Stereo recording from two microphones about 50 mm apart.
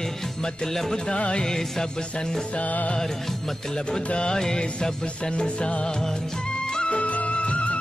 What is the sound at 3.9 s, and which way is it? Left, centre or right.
Music, centre.